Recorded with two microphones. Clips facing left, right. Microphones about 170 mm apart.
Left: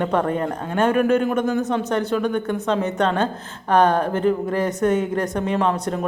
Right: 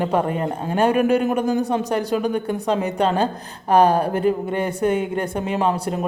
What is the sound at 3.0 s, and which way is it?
Speech, 35° right (ahead or behind).